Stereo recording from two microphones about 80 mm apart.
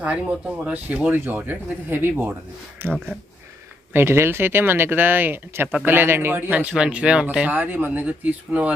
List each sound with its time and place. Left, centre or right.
0.0 s speech: centre